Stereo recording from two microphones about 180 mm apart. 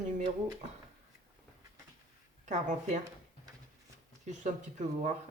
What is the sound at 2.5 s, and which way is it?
Speech, 40° right (ahead or behind).